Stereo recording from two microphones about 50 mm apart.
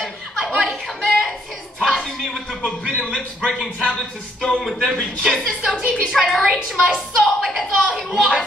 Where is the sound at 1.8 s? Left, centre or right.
Centre.